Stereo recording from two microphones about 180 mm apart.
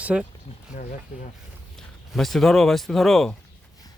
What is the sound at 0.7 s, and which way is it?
Speech, 45° left (ahead or behind).